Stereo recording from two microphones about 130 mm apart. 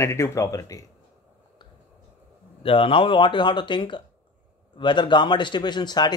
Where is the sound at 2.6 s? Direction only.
45° left (ahead or behind).